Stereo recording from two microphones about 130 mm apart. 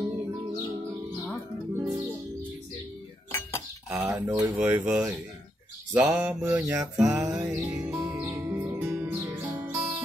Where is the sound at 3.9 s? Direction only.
10° right (ahead or behind).